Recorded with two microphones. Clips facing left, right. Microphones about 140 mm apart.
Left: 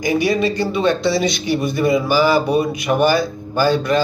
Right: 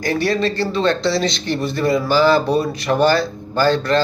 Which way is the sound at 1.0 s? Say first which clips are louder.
Left 1 dB; centre (ahead or behind).